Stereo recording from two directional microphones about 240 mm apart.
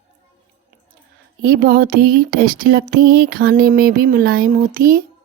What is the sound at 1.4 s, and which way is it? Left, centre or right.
Speech, right.